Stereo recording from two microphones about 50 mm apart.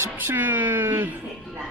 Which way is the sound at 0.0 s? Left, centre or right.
Right.